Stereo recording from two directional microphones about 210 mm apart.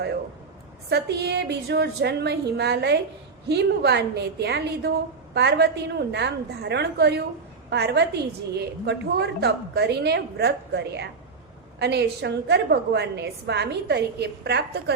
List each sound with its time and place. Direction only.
0.9 s a woman's voice: 50° right (ahead or behind)